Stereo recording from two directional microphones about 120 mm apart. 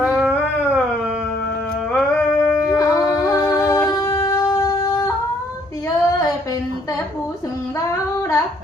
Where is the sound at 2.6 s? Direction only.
25° left (ahead or behind).